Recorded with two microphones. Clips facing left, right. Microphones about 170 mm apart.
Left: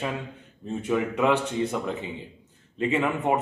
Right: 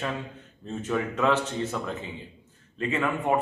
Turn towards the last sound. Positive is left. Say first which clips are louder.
# left 3 dB
turn(degrees=20)  # may be behind; listen again after turning